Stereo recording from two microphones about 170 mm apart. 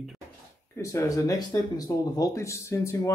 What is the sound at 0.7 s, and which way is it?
Speech, 20° left (ahead or behind).